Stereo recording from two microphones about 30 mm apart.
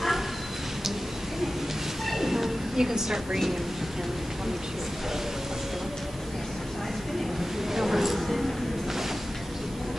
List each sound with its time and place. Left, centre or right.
2.0 s train: centre
2.8 s a woman's voice: right
7.7 s a sound: centre